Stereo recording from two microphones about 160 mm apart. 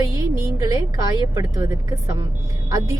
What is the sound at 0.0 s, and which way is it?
Music, 20° right (ahead or behind).